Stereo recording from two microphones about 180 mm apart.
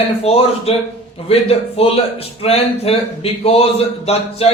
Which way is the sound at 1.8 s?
35° left (ahead or behind).